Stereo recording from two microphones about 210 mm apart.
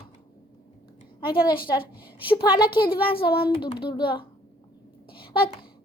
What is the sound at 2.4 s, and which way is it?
Speech, 20° left (ahead or behind).